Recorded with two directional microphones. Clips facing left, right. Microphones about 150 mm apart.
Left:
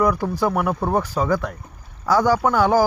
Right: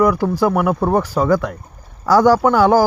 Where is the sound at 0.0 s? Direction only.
85° right.